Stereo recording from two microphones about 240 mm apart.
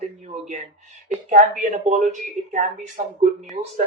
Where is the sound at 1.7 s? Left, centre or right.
Right.